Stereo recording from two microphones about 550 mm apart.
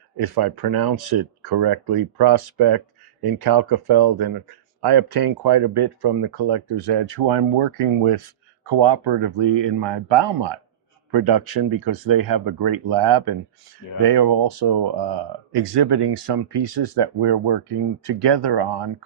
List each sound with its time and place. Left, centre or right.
0.2 s speech: right
8.7 s speech: right